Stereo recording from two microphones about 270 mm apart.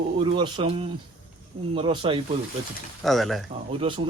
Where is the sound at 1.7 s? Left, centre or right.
Centre.